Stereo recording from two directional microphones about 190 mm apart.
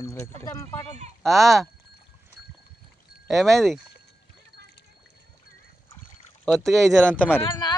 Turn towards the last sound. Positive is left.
turn(degrees=25)  # may be behind; listen again after turning